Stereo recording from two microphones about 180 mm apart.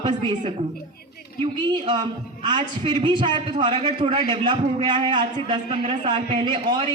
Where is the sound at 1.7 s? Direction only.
25° right (ahead or behind).